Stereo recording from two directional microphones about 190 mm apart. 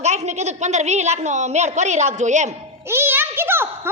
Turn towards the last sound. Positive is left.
turn(degrees=-10)  # may be behind; listen again after turning